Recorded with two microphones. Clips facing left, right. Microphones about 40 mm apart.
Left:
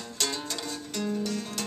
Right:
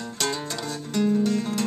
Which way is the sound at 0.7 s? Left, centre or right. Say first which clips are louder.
Right 10 dB; centre.